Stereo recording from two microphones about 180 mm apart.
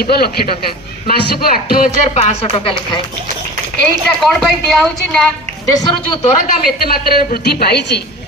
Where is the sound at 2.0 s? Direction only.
35° left (ahead or behind).